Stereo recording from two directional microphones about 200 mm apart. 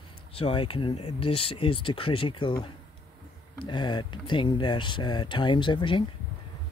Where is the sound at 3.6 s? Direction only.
25° left (ahead or behind).